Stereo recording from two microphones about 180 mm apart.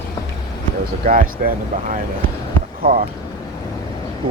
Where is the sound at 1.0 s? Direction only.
50° right (ahead or behind).